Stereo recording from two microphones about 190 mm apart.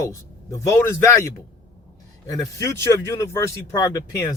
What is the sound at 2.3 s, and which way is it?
Speech, 15° left (ahead or behind).